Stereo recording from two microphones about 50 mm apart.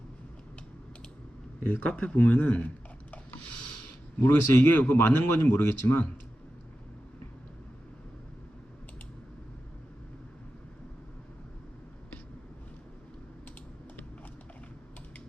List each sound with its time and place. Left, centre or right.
1.6 s speech: left
4.2 s a man's voice: left